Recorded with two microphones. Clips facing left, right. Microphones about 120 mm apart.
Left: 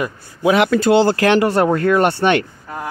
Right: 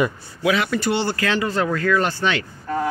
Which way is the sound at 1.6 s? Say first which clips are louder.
Left 6 dB; 45° left (ahead or behind).